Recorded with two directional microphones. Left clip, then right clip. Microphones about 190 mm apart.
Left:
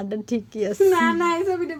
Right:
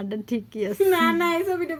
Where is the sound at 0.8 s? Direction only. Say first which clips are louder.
Left 2 dB; 25° right (ahead or behind).